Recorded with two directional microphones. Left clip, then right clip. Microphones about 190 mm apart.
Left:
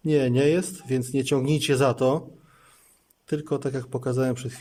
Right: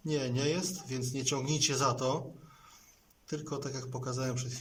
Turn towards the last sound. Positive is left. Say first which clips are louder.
# left 11 dB
turn(degrees=45)  # may be behind; listen again after turning